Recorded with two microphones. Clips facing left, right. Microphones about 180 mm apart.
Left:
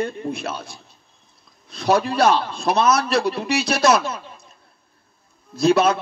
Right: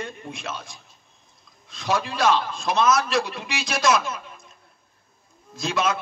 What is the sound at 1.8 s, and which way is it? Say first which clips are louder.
A man's voice: left 6 dB; 35° left (ahead or behind).